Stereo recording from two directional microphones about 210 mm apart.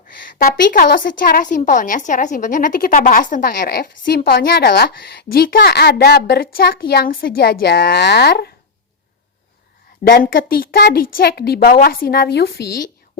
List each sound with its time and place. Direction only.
0.3 s a woman's voice: 45° left (ahead or behind)
10.0 s a woman's voice: 45° left (ahead or behind)